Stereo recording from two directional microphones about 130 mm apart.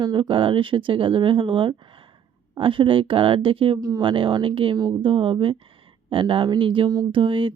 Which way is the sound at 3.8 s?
35° right (ahead or behind).